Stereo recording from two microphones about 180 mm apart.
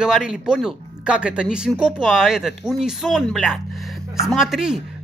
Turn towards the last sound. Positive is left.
turn(degrees=-5)  # may be behind; listen again after turning